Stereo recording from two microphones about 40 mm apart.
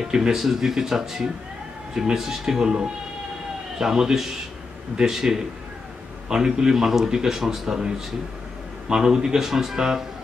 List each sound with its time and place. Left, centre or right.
0.0 s a man's voice: centre